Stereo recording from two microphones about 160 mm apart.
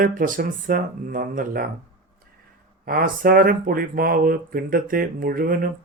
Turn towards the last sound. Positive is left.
turn(degrees=-60)  # may be behind; listen again after turning